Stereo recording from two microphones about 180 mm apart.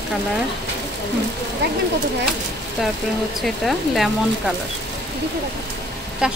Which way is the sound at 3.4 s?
Centre (ahead or behind).